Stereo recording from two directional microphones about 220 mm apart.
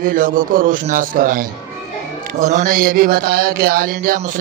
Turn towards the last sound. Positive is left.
turn(degrees=-40)  # may be behind; listen again after turning